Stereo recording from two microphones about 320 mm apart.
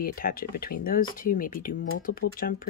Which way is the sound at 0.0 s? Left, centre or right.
Left.